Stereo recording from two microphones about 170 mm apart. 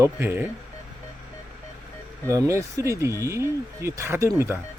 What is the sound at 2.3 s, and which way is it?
Speech, 15° right (ahead or behind).